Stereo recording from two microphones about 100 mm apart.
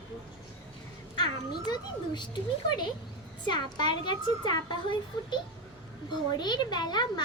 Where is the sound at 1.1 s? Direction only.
45° left (ahead or behind).